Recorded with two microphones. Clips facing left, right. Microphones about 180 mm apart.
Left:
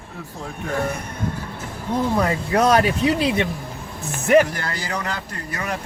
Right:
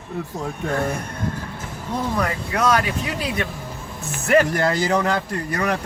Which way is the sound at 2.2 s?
30° left (ahead or behind).